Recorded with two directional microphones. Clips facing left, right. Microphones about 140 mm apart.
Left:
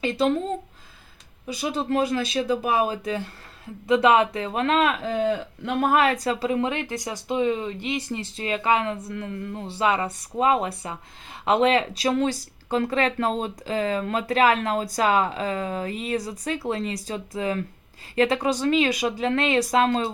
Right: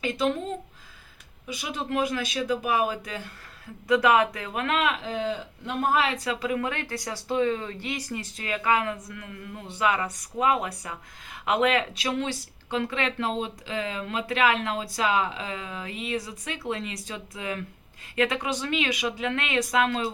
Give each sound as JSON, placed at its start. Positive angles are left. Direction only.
{"t": 0.0, "sound": "speech", "side_deg": 35}